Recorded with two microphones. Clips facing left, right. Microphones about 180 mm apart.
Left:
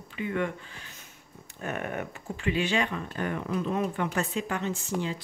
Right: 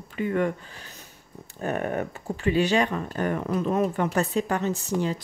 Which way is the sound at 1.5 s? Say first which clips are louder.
Right 6 dB; 35° right (ahead or behind).